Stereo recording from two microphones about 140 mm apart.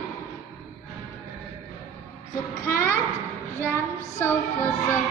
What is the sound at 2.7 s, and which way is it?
Child singing, 15° left (ahead or behind).